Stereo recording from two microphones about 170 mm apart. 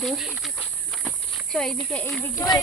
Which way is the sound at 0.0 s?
Centre (ahead or behind).